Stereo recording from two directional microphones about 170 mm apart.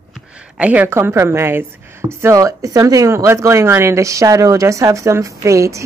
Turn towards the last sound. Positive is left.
turn(degrees=-20)  # may be behind; listen again after turning